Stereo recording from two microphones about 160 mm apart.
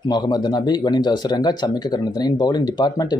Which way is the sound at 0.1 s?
25° left (ahead or behind).